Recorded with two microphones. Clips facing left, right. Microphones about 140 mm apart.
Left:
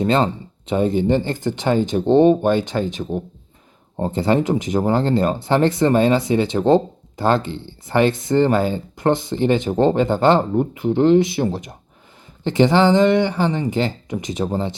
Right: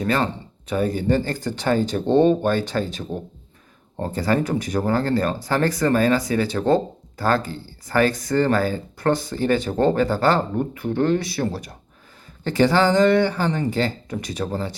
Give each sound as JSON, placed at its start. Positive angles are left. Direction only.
{"t": 0.0, "sound": "speech", "side_deg": 25}